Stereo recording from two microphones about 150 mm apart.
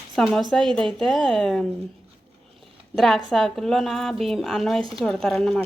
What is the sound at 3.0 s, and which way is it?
A woman's voice, centre (ahead or behind).